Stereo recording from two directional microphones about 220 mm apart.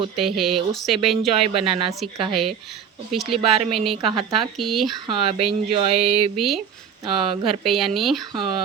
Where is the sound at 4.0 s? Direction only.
25° right (ahead or behind).